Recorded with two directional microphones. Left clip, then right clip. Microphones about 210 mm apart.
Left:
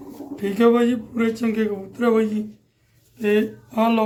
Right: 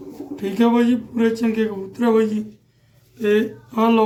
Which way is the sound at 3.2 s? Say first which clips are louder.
Right 2 dB; 15° left (ahead or behind).